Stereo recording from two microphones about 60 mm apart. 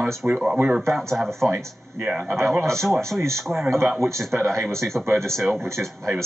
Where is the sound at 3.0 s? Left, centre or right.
Right.